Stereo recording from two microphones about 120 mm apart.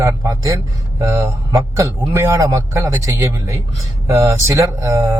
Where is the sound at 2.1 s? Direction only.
25° right (ahead or behind).